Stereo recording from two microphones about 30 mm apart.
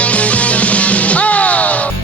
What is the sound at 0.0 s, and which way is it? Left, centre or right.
Music, left.